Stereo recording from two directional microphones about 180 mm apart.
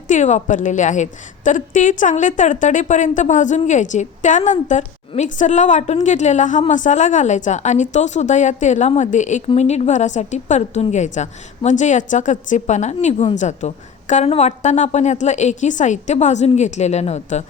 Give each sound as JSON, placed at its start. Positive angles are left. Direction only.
{"t": 0.1, "sound": "a woman's voice", "side_deg": 40}